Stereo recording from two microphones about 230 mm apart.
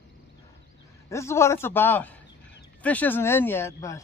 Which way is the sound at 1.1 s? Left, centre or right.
Centre.